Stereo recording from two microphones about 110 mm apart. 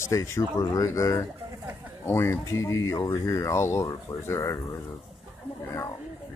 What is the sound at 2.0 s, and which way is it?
Speech, 20° left (ahead or behind).